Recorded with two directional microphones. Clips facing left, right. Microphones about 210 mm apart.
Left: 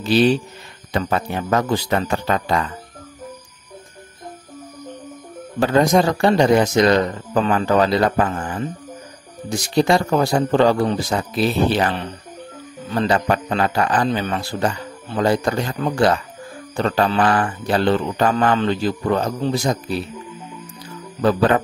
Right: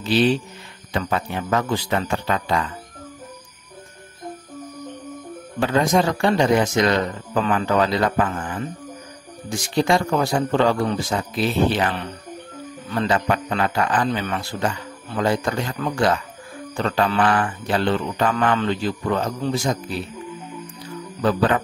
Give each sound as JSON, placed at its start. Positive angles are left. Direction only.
{"t": 0.0, "sound": "speech", "side_deg": 40}
{"t": 5.6, "sound": "speech", "side_deg": 40}